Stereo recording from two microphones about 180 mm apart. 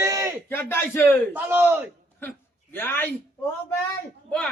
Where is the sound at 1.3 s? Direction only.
10° right (ahead or behind).